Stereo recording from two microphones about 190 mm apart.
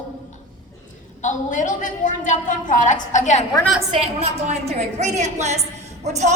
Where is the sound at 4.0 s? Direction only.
35° right (ahead or behind).